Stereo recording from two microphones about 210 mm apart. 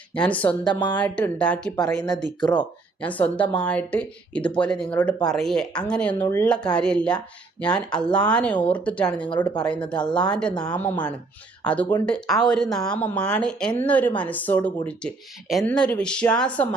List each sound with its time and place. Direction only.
0.1 s speech: 5° left (ahead or behind)
0.6 s a woman's voice: 20° left (ahead or behind)
0.9 s speech: 5° left (ahead or behind)